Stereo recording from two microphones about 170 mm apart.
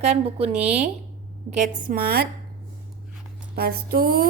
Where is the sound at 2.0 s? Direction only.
65° right (ahead or behind).